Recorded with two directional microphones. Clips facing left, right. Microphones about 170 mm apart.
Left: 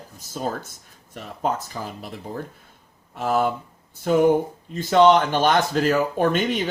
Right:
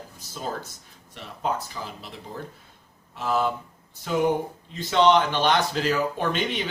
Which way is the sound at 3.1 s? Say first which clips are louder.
Left 3 dB; 50° left (ahead or behind).